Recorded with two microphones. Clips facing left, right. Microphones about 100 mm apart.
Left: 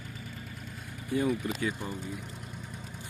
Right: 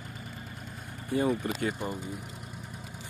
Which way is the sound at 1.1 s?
45° right (ahead or behind).